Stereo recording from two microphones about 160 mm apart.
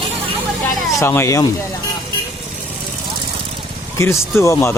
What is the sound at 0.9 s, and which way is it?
Speech, 15° left (ahead or behind).